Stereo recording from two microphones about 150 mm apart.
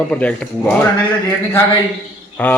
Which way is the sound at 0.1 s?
10° left (ahead or behind).